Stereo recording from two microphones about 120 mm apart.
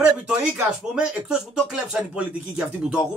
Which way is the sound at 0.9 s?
5° right (ahead or behind).